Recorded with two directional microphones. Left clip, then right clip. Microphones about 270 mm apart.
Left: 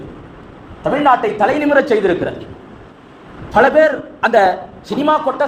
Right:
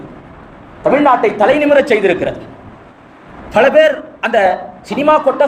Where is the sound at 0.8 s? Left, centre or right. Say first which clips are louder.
Right 3 dB; left.